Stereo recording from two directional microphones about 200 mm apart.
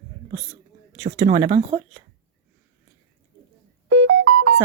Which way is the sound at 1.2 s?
30° right (ahead or behind).